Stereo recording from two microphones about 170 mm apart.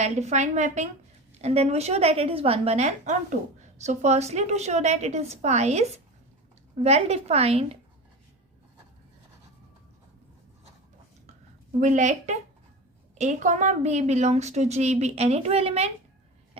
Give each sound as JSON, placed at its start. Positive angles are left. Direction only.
{"t": 0.0, "sound": "a woman's voice", "side_deg": -40}
{"t": 6.8, "sound": "a woman's voice", "side_deg": -35}
{"t": 11.8, "sound": "a woman's voice", "side_deg": -45}